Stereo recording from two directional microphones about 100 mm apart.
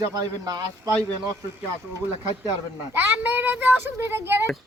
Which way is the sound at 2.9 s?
20° right (ahead or behind).